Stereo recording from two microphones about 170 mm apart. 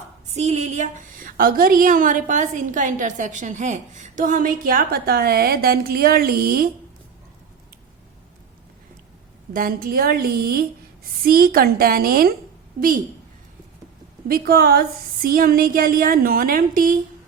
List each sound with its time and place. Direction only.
0.3 s a woman's voice: 40° right (ahead or behind); by 6.7 s 60° right (ahead or behind)
9.5 s a woman's voice: 55° right (ahead or behind)
14.3 s a woman's voice: 60° right (ahead or behind)